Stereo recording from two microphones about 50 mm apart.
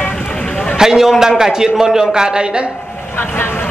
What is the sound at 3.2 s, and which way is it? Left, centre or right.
Speech, left.